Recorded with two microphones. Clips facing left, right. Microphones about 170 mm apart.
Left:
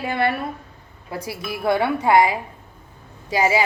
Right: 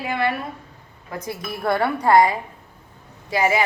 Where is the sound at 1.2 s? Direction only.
5° left (ahead or behind).